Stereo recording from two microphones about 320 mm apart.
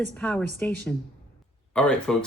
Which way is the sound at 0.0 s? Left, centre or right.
Centre.